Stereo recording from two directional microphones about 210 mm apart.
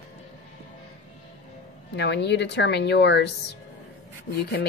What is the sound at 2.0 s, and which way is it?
A woman's voice, 55° left (ahead or behind).